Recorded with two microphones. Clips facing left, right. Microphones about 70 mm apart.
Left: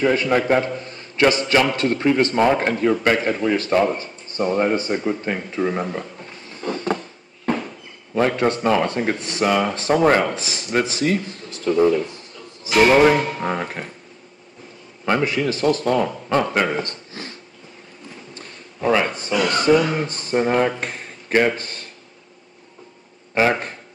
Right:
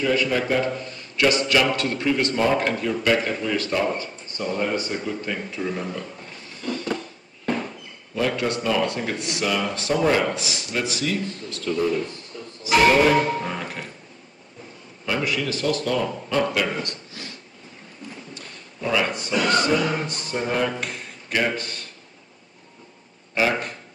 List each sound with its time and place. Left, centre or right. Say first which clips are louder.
0.0 s a man's voice: left 4 dB; left
6.6 s a sound: left 4 dB; left
8.1 s a man's voice: left 5 dB; left
15.0 s speech: left 5 dB; left
18.3 s a sound: left 1 dB; left
20.1 s a man's voice: left 6 dB; left
23.3 s a man's voice: left 4 dB; left